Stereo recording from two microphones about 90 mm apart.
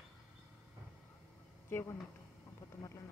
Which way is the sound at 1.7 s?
30° left (ahead or behind).